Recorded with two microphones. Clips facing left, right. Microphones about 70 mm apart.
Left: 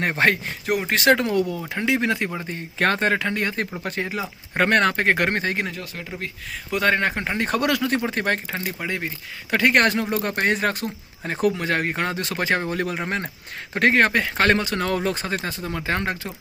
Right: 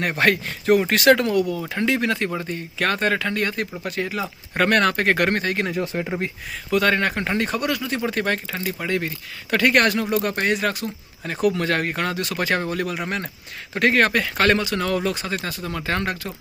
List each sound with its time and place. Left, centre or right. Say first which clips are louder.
0.0 s speech: even; left
0.6 s speech: right 7 dB; centre
0.9 s speech: right 2 dB; left
1.6 s speech: right 3 dB; centre
1.9 s speech: left 1 dB; centre
2.5 s speech: left 1 dB; left
5.7 s speech: right 9 dB; right
6.7 s speech: right 1 dB; left
7.5 s speech: left 3 dB; left
8.0 s speech: even; left
8.8 s speech: right 3 dB; centre
11.5 s speech: right 1 dB; centre